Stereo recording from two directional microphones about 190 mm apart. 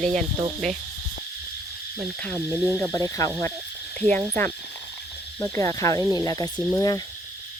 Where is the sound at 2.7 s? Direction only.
10° left (ahead or behind).